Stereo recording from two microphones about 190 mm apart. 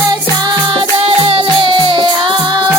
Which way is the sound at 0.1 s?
25° right (ahead or behind).